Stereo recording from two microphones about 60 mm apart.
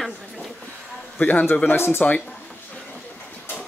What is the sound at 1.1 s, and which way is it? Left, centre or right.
Speech, left.